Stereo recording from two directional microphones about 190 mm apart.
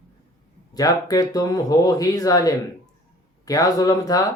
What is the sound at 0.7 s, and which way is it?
Speech, 20° left (ahead or behind).